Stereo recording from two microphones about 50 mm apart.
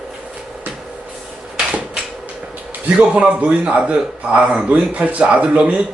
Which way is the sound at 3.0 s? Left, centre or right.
Right.